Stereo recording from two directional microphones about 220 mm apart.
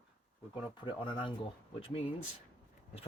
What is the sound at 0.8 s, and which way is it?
Speech, 20° left (ahead or behind).